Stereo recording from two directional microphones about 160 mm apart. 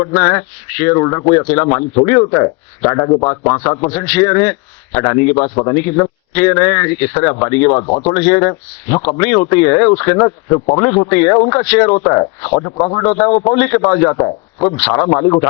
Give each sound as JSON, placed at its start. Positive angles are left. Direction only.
{"t": 0.0, "sound": "a man's voice", "side_deg": 20}
{"t": 4.1, "sound": "a man's voice", "side_deg": 15}